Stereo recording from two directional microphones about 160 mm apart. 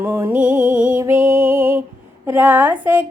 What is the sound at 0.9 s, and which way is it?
Music, 15° right (ahead or behind).